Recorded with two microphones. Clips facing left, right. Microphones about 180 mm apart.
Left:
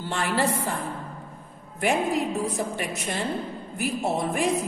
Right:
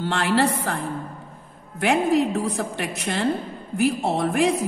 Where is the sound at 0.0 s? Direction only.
75° right (ahead or behind).